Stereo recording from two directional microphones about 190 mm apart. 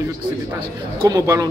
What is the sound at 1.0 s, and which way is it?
Speech, 20° right (ahead or behind).